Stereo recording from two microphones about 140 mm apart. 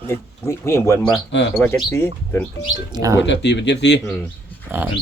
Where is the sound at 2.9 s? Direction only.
25° right (ahead or behind).